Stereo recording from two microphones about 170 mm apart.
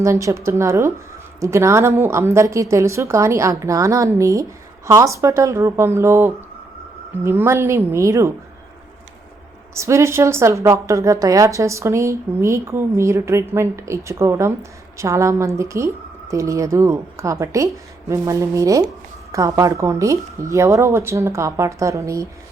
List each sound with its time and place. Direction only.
0.0 s a woman's voice: 15° right (ahead or behind)
9.7 s a woman's voice: 15° right (ahead or behind)